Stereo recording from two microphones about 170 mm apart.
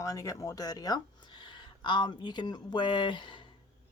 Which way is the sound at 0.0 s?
20° left (ahead or behind).